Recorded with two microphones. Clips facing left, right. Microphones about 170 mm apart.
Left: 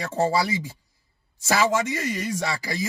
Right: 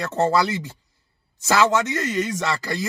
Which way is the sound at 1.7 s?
70° right (ahead or behind).